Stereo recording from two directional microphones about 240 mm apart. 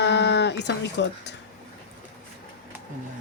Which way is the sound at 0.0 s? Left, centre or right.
Left.